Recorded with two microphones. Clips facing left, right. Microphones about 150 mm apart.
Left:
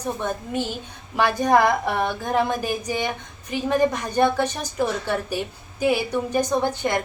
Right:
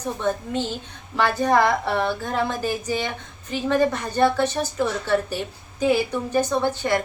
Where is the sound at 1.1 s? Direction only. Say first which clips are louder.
Left 1 dB; 15° left (ahead or behind).